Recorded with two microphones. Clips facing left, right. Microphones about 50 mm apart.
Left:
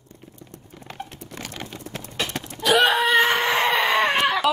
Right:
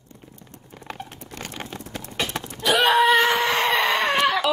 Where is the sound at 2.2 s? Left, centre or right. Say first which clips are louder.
Left 2 dB; centre.